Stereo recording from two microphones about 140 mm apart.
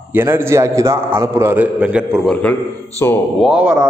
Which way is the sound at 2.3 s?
10° left (ahead or behind).